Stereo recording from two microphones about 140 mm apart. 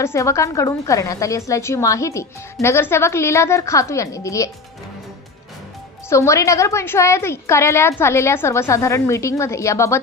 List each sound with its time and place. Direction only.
0.0 s a woman's voice: 20° left (ahead or behind)
6.1 s a woman's voice: 20° left (ahead or behind)